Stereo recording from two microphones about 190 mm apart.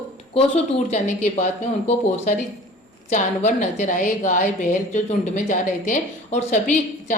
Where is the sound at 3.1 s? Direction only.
40° left (ahead or behind).